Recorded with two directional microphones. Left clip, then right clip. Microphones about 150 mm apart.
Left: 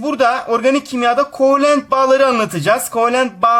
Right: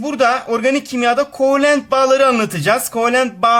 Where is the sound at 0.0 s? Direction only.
Centre (ahead or behind).